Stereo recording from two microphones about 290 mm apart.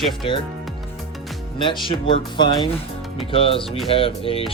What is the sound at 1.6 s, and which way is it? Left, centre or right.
Speech, centre.